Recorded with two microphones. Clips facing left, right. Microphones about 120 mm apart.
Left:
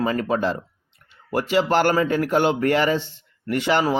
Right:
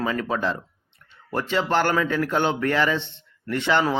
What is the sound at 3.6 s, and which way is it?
Speech, 10° left (ahead or behind).